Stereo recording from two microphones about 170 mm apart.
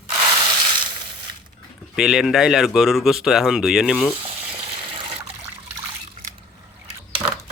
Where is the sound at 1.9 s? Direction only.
5° right (ahead or behind).